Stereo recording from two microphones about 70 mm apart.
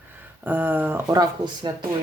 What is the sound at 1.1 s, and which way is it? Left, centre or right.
Speech, right.